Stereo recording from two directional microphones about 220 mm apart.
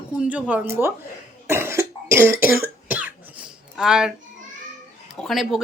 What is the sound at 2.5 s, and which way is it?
Cough, 40° left (ahead or behind).